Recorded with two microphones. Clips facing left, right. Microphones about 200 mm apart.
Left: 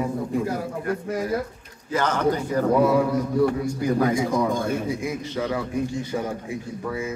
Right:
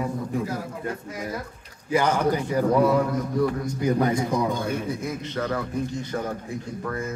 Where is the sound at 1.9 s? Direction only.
10° right (ahead or behind).